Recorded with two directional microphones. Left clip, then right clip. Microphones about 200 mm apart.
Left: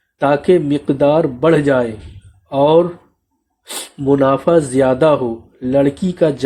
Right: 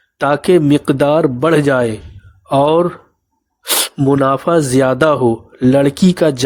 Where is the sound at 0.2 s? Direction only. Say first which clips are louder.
Right 1 dB; 40° right (ahead or behind).